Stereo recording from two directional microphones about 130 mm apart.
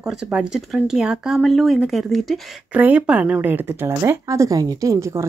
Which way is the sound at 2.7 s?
10° right (ahead or behind).